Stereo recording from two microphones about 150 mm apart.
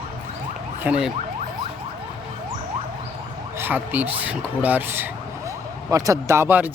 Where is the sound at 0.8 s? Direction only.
10° right (ahead or behind).